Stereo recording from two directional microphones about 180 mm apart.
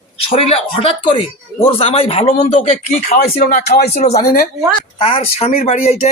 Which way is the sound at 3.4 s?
50° left (ahead or behind).